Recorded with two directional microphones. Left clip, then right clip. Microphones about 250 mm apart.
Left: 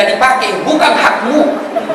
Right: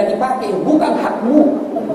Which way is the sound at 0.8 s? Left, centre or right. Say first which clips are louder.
Left 7 dB; centre.